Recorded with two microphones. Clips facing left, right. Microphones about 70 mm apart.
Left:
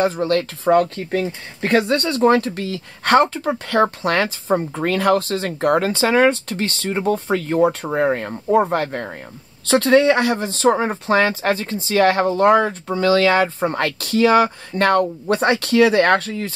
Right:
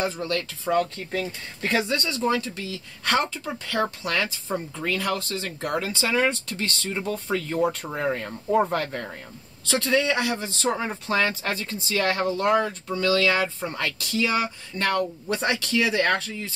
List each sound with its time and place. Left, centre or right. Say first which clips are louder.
0.0 s speech: left 9 dB; left
7.6 s speech: left 8 dB; left
8.3 s speech: left 5 dB; left
9.7 s speech: left 9 dB; left